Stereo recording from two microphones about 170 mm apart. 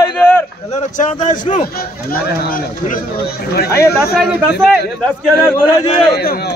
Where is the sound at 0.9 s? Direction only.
50° left (ahead or behind).